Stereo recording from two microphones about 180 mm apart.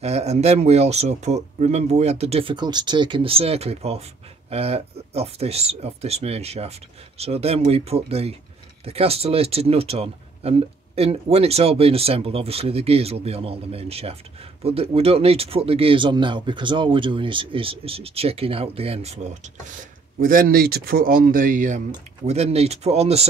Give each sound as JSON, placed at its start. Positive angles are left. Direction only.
{"t": 0.0, "sound": "speech", "side_deg": -35}
{"t": 20.2, "sound": "speech", "side_deg": -50}